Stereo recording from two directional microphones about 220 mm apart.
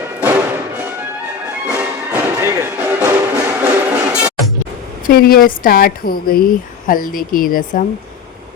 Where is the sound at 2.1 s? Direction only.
10° right (ahead or behind).